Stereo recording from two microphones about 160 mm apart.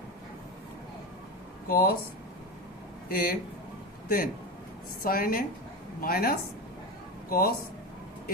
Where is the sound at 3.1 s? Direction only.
65° left (ahead or behind).